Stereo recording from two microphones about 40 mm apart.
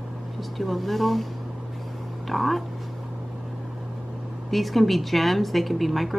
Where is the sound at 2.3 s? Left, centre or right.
Centre.